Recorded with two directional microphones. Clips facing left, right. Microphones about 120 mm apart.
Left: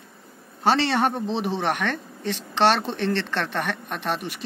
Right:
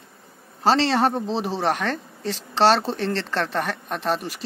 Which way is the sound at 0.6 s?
35° right (ahead or behind).